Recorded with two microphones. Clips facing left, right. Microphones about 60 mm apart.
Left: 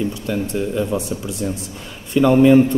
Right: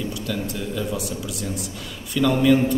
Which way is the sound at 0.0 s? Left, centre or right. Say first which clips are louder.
Left 5 dB; left.